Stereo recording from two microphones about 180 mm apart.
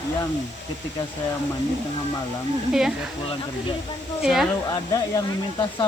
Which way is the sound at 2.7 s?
5° right (ahead or behind).